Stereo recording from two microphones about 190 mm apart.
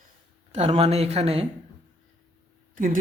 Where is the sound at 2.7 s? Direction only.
45° right (ahead or behind).